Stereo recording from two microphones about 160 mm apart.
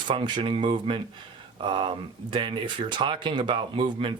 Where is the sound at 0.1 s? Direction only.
30° right (ahead or behind).